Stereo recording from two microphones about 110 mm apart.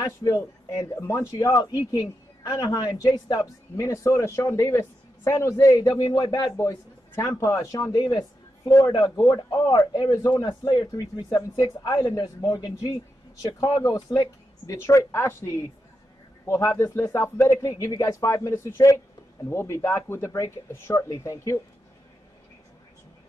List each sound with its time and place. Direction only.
0.3 s a man's voice: 20° left (ahead or behind)